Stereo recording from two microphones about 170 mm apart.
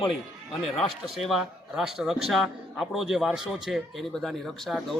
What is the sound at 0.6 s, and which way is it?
A man's voice, centre (ahead or behind).